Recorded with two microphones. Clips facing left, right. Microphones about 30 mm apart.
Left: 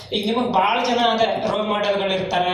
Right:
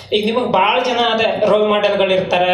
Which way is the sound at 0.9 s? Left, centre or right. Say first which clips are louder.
Right 3 dB; right.